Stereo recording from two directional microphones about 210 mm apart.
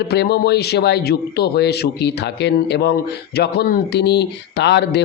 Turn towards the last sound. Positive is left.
turn(degrees=55)  # may be behind; listen again after turning